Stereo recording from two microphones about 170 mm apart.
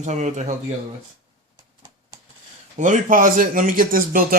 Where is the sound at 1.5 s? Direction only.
25° right (ahead or behind).